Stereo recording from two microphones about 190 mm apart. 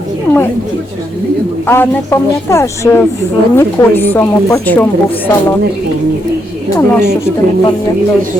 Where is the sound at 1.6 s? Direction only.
10° left (ahead or behind).